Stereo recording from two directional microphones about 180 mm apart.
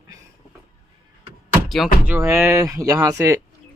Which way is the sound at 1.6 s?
Centre (ahead or behind).